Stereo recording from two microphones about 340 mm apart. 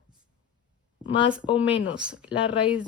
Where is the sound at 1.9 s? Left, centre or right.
Centre.